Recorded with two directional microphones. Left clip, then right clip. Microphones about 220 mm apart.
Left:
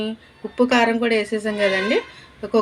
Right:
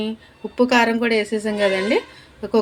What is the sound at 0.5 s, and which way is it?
A woman's voice, centre (ahead or behind).